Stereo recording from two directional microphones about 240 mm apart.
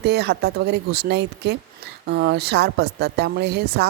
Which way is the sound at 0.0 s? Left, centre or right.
Right.